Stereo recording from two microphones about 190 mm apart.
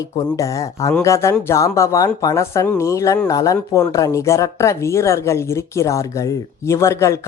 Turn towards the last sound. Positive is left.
turn(degrees=15)  # may be behind; listen again after turning